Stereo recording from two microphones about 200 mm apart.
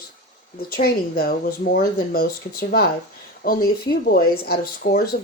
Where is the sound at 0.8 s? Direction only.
50° left (ahead or behind).